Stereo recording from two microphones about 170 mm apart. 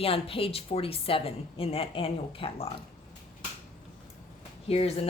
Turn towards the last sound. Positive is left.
turn(degrees=35)  # may be behind; listen again after turning